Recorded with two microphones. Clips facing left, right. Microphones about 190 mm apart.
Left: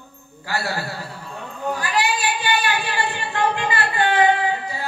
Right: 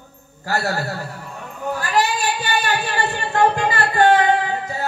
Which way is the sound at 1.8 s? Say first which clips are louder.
Right 4 dB; 45° right (ahead or behind).